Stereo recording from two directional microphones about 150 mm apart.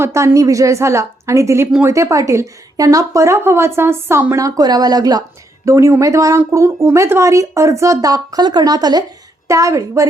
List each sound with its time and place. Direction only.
0.0 s speech: 15° right (ahead or behind)